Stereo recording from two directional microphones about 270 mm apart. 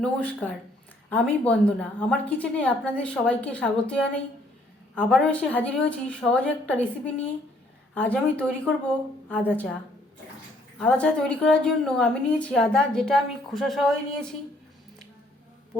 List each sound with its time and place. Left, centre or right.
0.0 s a woman's voice: centre
10.8 s a woman's voice: centre